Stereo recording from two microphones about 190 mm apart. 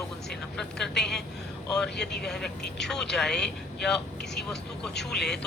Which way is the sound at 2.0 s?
60° left (ahead or behind).